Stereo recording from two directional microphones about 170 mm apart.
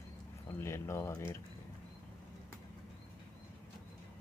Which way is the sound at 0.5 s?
15° left (ahead or behind).